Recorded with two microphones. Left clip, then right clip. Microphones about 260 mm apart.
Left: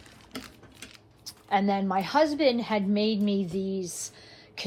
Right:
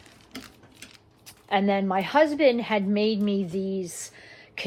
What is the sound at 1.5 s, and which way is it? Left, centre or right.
A woman's voice, right.